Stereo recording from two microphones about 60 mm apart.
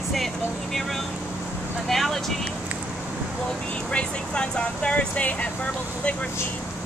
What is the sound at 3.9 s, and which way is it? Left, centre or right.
Speech, centre.